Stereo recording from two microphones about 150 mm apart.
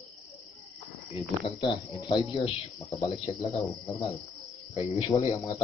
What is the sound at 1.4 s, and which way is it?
Speech, 35° left (ahead or behind).